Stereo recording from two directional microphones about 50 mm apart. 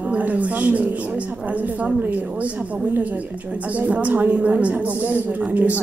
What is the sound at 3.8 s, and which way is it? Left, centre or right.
A woman's voice, right.